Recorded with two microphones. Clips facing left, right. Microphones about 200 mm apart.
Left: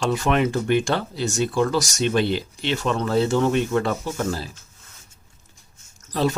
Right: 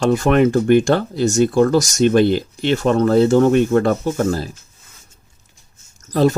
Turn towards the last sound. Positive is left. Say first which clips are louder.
# right 7 dB
turn(degrees=-45)  # may be behind; listen again after turning